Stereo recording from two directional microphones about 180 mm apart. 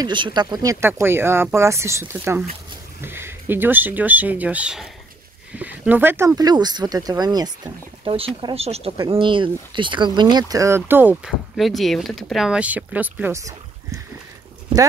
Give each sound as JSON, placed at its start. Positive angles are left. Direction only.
{"t": 0.0, "sound": "speech", "side_deg": -25}